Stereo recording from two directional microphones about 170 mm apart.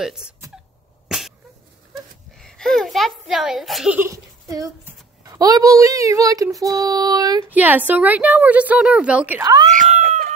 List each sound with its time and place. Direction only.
0.0 s speech: 5° right (ahead or behind)
1.0 s cough: centre (ahead or behind)
2.3 s a sound: 5° left (ahead or behind); by 4.7 s 20° right (ahead or behind)
5.2 s speech: 20° right (ahead or behind)
7.5 s a woman's voice: 10° right (ahead or behind)
9.4 s speech: 25° right (ahead or behind)
9.7 s cat: 45° right (ahead or behind)